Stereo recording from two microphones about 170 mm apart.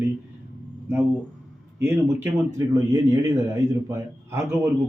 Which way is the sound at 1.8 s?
15° right (ahead or behind).